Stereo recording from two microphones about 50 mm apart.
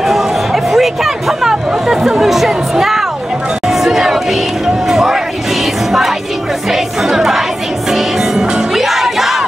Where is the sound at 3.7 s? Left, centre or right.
Centre.